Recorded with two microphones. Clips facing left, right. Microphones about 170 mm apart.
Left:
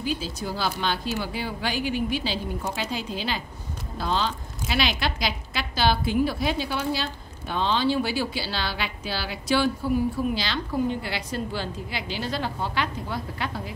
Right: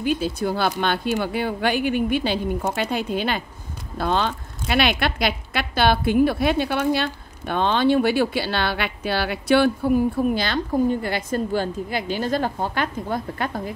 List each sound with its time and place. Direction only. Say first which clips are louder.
0.0 s a woman's voice: right 7 dB; 60° right (ahead or behind)